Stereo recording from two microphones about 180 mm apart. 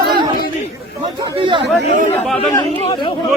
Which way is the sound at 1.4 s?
25° right (ahead or behind).